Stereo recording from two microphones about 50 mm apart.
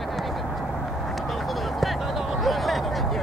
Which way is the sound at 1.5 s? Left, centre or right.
Centre.